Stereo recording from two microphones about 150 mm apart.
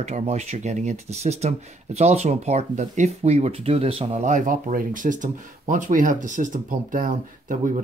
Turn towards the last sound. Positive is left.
turn(degrees=-65)  # may be behind; listen again after turning